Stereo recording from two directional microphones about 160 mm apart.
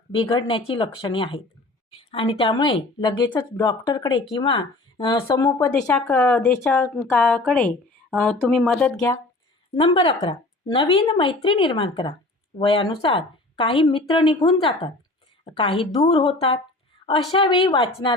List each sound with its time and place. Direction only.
0.1 s a woman's voice: 35° left (ahead or behind); by 9.1 s 5° left (ahead or behind)
9.7 s a woman's voice: 35° left (ahead or behind)